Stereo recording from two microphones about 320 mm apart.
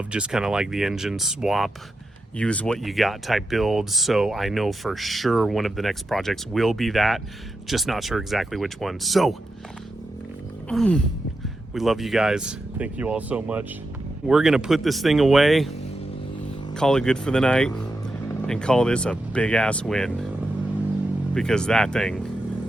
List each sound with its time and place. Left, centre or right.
0.1 s speech: centre
10.7 s speech: centre
16.7 s speech: centre
21.3 s speech: centre